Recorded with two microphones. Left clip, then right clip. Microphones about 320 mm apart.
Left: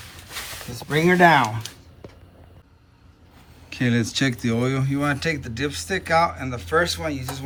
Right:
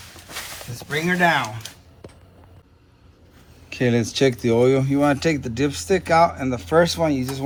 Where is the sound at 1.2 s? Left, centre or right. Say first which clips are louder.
Left 4 dB; centre.